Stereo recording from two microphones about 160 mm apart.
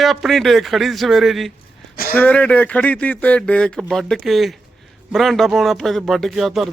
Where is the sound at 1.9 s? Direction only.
70° left (ahead or behind).